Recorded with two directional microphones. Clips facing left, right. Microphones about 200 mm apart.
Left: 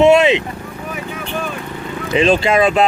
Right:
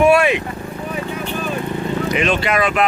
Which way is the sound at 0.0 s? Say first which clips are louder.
Left 3 dB; 25° left (ahead or behind).